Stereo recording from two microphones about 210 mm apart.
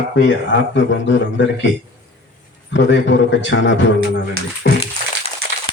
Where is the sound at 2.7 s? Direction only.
60° left (ahead or behind).